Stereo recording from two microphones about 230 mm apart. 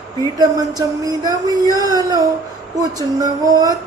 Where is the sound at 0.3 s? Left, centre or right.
Centre.